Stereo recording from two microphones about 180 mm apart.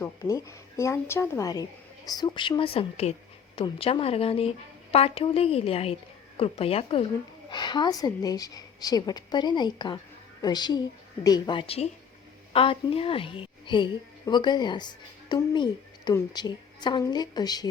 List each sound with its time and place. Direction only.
0.0 s a woman's voice: 15° left (ahead or behind)